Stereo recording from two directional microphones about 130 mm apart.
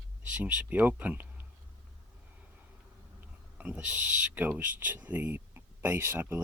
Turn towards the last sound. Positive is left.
turn(degrees=-20)  # may be behind; listen again after turning